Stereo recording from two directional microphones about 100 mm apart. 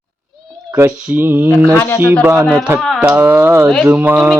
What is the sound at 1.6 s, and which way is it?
Speech, 20° left (ahead or behind).